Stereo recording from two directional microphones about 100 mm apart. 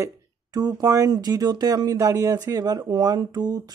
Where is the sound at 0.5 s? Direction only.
40° right (ahead or behind).